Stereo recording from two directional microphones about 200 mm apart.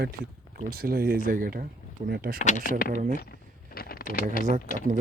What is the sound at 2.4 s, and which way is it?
Speech, 35° left (ahead or behind).